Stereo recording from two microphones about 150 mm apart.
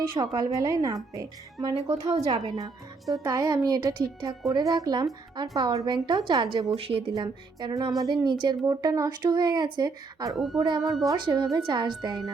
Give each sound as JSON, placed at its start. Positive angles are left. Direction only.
{"t": 0.1, "sound": "speech", "side_deg": -30}
{"t": 6.7, "sound": "speech", "side_deg": -40}
{"t": 7.1, "sound": "speech", "side_deg": -25}
{"t": 10.3, "sound": "speech", "side_deg": 0}
{"t": 11.0, "sound": "speech", "side_deg": -25}